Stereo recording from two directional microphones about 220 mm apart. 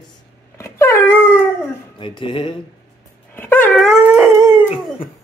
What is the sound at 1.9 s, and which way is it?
Speech, 20° left (ahead or behind).